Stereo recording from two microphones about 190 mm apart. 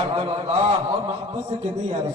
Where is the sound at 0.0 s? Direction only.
25° right (ahead or behind).